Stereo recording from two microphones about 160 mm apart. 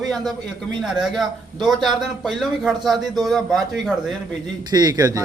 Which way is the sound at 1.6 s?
Centre (ahead or behind).